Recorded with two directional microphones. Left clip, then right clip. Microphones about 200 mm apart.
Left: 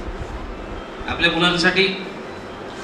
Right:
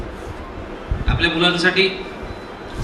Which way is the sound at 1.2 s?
25° right (ahead or behind).